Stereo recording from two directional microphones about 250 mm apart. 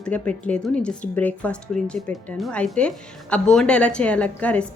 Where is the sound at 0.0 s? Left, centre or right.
Centre.